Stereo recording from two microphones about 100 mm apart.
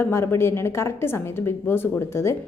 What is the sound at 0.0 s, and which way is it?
A woman's voice, 25° left (ahead or behind).